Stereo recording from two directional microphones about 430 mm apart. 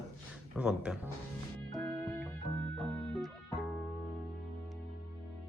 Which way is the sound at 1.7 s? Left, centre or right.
Centre.